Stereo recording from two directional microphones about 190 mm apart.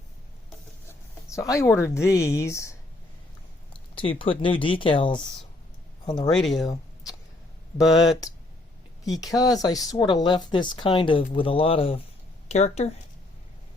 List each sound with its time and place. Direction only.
0.9 s speech: 15° left (ahead or behind)
3.7 s speech: 30° left (ahead or behind)
6.3 s speech: centre (ahead or behind)
6.7 s a sound: 20° left (ahead or behind)
9.0 s speech: 20° left (ahead or behind); by 12.9 s 35° left (ahead or behind)